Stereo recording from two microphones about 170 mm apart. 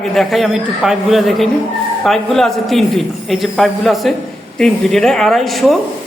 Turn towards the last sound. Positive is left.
turn(degrees=0)  # may be behind; listen again after turning